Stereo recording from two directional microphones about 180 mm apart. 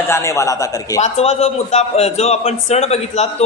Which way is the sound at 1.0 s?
35° left (ahead or behind).